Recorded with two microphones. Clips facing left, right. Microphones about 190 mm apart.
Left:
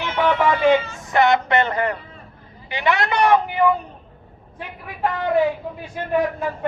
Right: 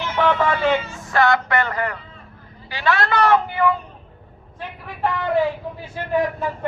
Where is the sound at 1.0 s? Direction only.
20° left (ahead or behind).